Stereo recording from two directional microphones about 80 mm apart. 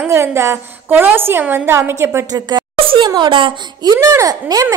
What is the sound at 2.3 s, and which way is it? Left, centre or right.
A child's voice, right.